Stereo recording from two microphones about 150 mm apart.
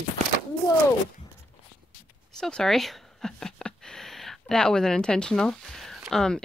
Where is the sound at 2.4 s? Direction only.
5° left (ahead or behind).